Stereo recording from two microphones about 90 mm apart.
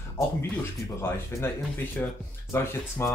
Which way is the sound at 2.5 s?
25° left (ahead or behind).